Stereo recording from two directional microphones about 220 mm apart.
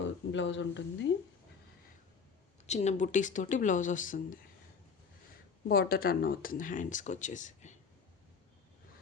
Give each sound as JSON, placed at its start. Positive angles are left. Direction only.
{"t": 0.0, "sound": "speech", "side_deg": 55}
{"t": 2.6, "sound": "speech", "side_deg": 30}
{"t": 5.6, "sound": "speech", "side_deg": 45}